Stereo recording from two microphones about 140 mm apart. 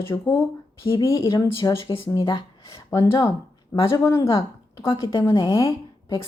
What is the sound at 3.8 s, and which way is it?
Speech, 20° left (ahead or behind).